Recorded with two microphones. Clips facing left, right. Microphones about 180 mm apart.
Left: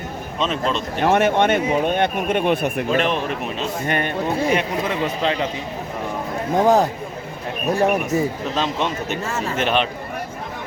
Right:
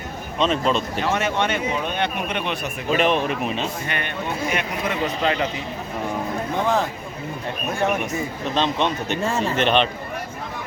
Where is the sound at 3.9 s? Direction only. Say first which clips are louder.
Left 6 dB; 40° left (ahead or behind).